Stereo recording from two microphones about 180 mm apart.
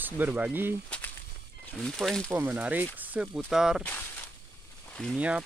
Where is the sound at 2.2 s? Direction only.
10° right (ahead or behind).